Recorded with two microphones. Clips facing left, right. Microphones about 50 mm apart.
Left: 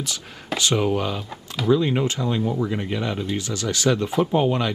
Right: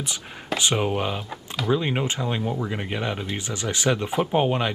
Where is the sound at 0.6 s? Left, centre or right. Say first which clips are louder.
Left 2 dB; right.